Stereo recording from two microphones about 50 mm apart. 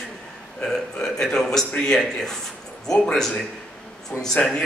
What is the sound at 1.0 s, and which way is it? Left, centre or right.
Speech, centre.